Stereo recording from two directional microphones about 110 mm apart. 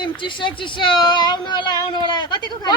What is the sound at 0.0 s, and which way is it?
A woman's voice, 50° left (ahead or behind).